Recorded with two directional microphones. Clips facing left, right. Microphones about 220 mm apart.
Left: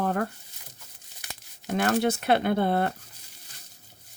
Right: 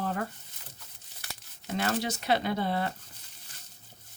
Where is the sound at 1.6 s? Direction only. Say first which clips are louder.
Left 6 dB; 55° left (ahead or behind).